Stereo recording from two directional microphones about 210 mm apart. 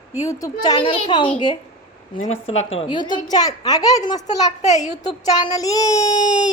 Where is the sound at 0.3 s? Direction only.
15° left (ahead or behind).